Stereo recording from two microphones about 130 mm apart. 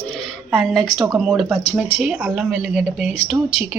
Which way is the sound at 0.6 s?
Centre (ahead or behind).